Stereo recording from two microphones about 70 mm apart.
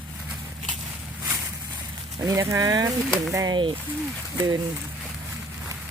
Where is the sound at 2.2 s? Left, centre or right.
Right.